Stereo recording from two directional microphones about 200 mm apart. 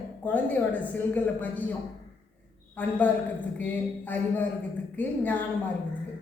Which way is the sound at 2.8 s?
10° left (ahead or behind).